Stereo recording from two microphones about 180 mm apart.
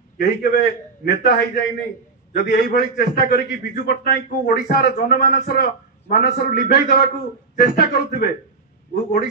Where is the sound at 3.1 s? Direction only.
55° left (ahead or behind).